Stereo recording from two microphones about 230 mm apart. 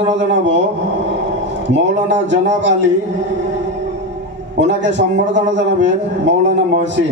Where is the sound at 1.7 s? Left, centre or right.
Right.